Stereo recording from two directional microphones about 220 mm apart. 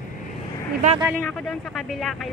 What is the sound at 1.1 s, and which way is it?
Speech, 5° left (ahead or behind).